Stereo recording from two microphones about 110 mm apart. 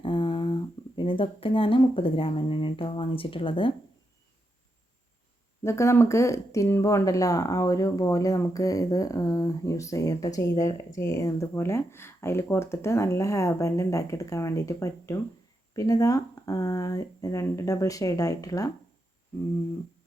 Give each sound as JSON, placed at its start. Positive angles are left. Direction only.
{"t": 0.0, "sound": "speech", "side_deg": 50}
{"t": 5.6, "sound": "speech", "side_deg": 25}